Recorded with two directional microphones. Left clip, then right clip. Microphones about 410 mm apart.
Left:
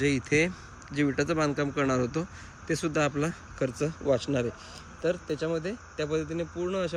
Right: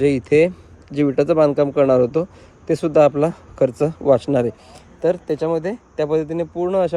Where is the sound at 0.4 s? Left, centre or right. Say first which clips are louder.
Right 12 dB; centre.